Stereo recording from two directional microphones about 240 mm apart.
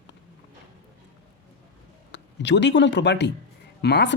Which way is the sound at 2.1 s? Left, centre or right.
Left.